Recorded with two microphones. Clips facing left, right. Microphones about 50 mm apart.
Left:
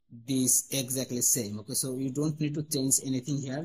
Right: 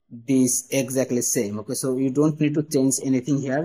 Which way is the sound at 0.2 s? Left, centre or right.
Right.